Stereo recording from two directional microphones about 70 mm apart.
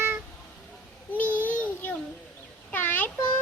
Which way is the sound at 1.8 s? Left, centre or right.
Left.